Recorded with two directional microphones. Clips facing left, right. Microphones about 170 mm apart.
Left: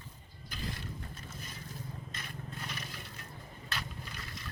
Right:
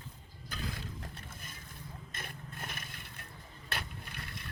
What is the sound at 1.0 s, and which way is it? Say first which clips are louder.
Vehicle: left 1 dB; 60° right (ahead or behind).